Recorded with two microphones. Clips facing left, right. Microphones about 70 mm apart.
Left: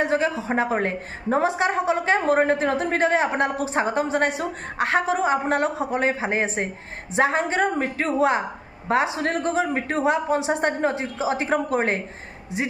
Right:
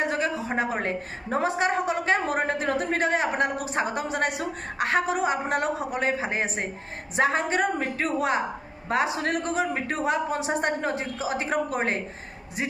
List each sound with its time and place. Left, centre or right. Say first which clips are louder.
0.0 s a woman's voice: left 4 dB; left
9.1 s a woman's voice: left 3 dB; left